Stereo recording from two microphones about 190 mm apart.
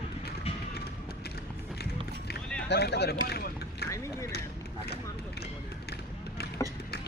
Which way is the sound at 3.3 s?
55° left (ahead or behind).